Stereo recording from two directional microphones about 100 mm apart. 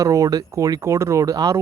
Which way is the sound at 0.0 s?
35° right (ahead or behind).